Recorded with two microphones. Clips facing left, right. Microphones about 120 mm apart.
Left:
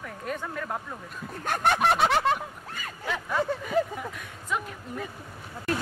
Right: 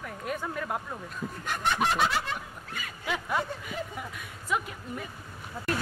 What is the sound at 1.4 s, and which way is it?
Snicker, 50° left (ahead or behind).